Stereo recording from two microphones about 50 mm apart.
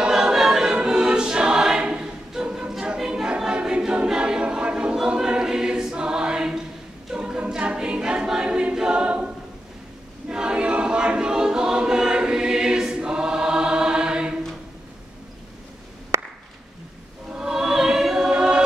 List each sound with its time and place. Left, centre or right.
0.0 s choir: centre
16.1 s a sound: right
17.3 s music: centre